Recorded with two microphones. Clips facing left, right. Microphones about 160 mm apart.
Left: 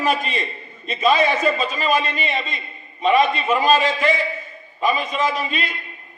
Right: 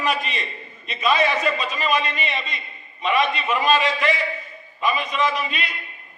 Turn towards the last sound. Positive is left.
turn(degrees=40)  # may be behind; listen again after turning